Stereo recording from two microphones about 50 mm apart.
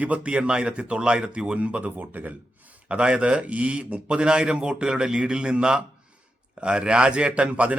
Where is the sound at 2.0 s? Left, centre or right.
Right.